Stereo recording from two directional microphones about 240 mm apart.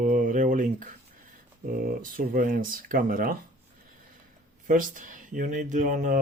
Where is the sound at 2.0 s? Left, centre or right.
Right.